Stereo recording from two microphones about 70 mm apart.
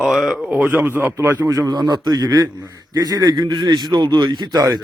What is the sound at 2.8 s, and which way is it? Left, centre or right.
A man's voice, right.